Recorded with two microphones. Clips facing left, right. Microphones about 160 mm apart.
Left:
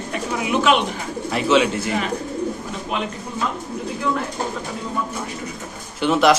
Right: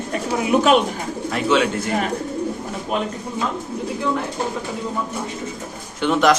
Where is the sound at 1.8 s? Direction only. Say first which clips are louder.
Right 1 dB; 45° right (ahead or behind).